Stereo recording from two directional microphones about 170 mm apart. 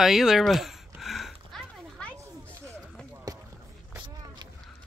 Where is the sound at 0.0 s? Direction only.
5° right (ahead or behind).